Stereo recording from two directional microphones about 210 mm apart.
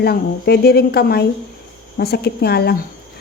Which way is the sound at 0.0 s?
50° left (ahead or behind).